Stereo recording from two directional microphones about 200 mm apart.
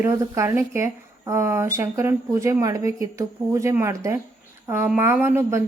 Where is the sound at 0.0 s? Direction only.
15° right (ahead or behind).